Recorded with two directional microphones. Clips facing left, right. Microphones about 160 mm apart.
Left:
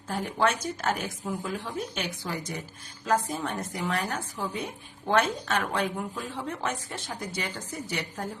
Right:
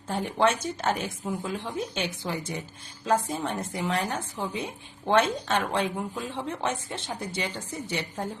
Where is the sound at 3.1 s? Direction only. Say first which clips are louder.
Right 1 dB; 25° right (ahead or behind).